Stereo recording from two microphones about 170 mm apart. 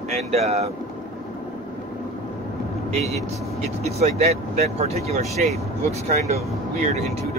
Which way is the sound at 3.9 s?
40° right (ahead or behind).